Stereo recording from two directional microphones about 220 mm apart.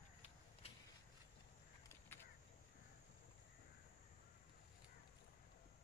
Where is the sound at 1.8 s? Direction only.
10° left (ahead or behind).